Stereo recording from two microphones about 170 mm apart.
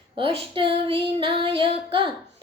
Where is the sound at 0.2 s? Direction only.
30° right (ahead or behind).